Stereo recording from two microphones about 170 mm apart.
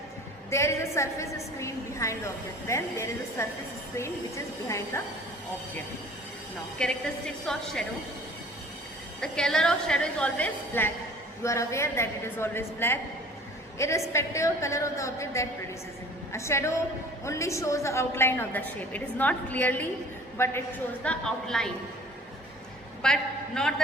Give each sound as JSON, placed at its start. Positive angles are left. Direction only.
{"t": 0.5, "sound": "a woman's voice", "side_deg": 15}
{"t": 4.9, "sound": "a woman's voice", "side_deg": 15}
{"t": 6.7, "sound": "a woman's voice", "side_deg": 5}
{"t": 9.2, "sound": "a woman's voice", "side_deg": 5}
{"t": 23.0, "sound": "a man's voice", "side_deg": 5}